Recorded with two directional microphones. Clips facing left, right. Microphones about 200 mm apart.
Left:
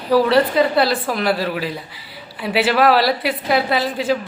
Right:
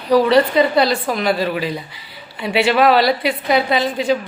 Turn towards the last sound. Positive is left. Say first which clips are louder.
# right 2 dB
turn(degrees=5)  # may be behind; listen again after turning